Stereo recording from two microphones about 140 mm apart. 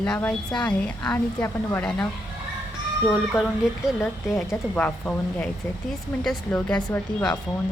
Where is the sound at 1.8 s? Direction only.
5° left (ahead or behind).